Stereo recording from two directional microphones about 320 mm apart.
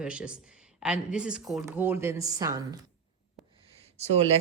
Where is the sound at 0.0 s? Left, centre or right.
Centre.